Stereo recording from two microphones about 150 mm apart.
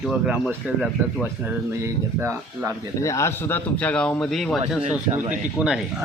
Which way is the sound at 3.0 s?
20° left (ahead or behind).